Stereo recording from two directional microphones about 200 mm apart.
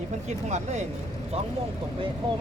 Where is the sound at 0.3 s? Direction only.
35° right (ahead or behind).